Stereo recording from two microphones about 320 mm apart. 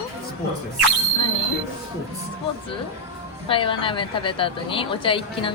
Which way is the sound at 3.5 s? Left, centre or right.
Centre.